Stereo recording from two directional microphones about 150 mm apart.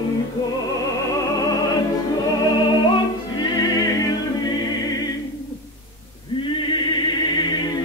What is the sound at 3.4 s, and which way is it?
Music, 25° left (ahead or behind).